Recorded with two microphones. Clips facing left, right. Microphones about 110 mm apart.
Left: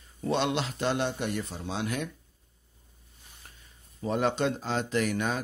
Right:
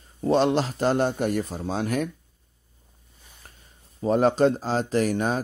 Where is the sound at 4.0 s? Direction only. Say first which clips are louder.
Right 8 dB; 40° right (ahead or behind).